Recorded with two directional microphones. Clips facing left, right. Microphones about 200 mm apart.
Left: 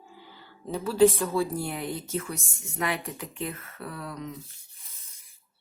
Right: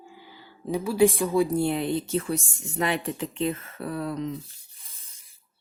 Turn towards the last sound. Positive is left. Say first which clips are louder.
# right 7 dB
turn(degrees=-30)  # may be behind; listen again after turning